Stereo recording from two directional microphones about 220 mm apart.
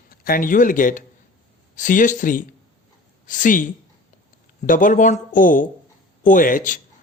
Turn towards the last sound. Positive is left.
turn(degrees=35)  # may be behind; listen again after turning